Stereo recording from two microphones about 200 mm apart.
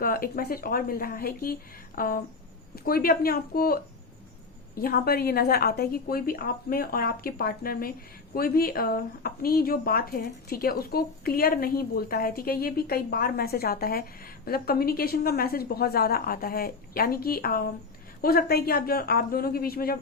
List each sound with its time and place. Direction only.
0.0 s speech: 45° left (ahead or behind)